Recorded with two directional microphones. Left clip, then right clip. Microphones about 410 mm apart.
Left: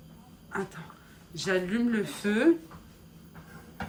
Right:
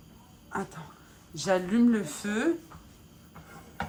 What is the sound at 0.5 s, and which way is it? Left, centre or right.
A woman's voice, centre.